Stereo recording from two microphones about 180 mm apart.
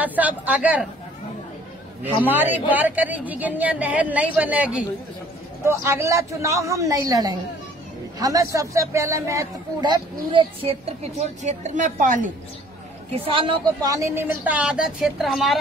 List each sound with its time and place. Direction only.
0.0 s a woman's voice: 10° right (ahead or behind)
2.0 s a woman's voice: 10° right (ahead or behind)
10.3 s a woman's voice: 30° right (ahead or behind)
13.1 s a man's voice: 30° right (ahead or behind)
13.8 s a woman's voice: 15° right (ahead or behind)